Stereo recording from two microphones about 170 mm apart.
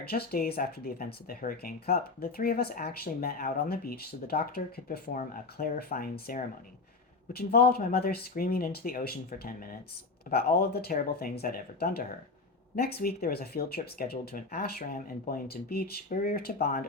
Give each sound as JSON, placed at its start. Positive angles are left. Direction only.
{"t": 0.0, "sound": "speech", "side_deg": 65}